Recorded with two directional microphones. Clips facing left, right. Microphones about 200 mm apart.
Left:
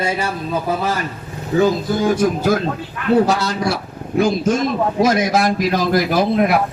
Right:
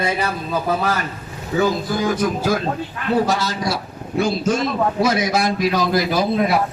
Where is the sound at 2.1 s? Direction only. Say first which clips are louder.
Left 4 dB; 45° left (ahead or behind).